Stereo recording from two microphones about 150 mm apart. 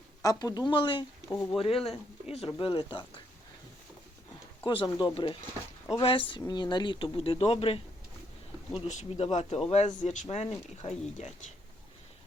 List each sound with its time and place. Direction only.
0.2 s speech: 25° left (ahead or behind)
1.4 s speech: 5° left (ahead or behind)
1.6 s speech: 40° left (ahead or behind)
4.6 s speech: 35° left (ahead or behind)